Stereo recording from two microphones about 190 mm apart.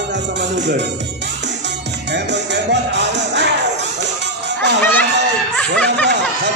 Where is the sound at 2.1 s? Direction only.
65° right (ahead or behind).